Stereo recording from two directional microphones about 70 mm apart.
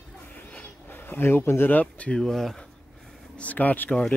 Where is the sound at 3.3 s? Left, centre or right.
Left.